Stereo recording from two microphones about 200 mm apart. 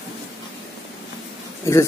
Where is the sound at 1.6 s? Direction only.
15° left (ahead or behind).